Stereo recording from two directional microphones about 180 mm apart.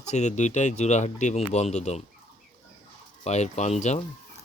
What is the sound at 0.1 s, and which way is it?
Speech, 40° left (ahead or behind).